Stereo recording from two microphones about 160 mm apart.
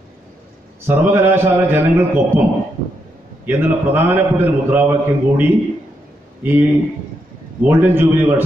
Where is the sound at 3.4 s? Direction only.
10° right (ahead or behind).